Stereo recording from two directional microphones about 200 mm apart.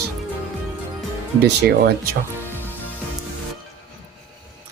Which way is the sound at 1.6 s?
55° right (ahead or behind).